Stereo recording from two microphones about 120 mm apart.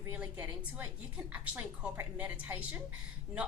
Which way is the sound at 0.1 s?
15° right (ahead or behind).